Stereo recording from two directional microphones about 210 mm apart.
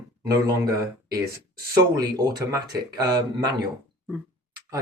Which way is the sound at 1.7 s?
20° right (ahead or behind).